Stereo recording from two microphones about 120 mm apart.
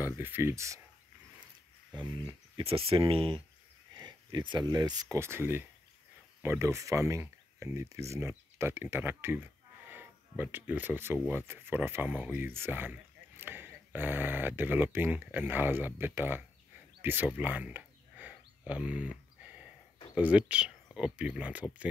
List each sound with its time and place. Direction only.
0.2 s speech: 20° right (ahead or behind)
2.0 s speech: 40° right (ahead or behind)
3.9 s speech: 35° right (ahead or behind)
5.0 s speech: 20° right (ahead or behind)
17.4 s a sound: 15° right (ahead or behind)
20.2 s speech: 10° right (ahead or behind)